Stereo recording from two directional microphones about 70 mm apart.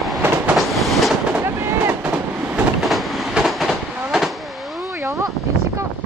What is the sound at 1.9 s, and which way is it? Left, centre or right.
Train, centre.